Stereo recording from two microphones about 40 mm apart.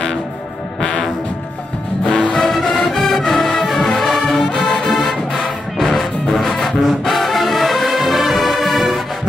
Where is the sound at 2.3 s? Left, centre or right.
Centre.